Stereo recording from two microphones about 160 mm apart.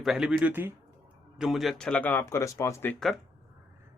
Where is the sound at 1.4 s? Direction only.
Centre (ahead or behind).